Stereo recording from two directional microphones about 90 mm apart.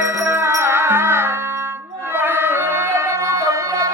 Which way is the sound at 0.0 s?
25° right (ahead or behind).